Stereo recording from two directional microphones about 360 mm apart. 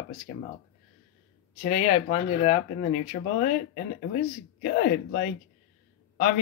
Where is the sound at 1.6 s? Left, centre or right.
Centre.